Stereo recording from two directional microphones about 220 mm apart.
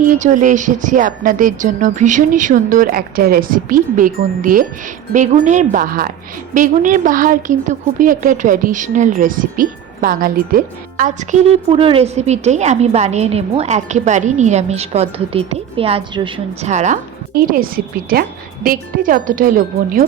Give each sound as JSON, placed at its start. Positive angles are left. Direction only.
{"t": 0.0, "sound": "a woman's voice", "side_deg": -35}